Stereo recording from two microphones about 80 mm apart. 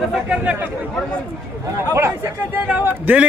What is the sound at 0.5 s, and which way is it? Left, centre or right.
Speech, right.